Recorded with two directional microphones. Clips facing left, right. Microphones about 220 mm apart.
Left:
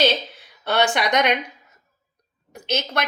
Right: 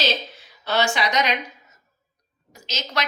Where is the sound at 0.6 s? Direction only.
60° left (ahead or behind).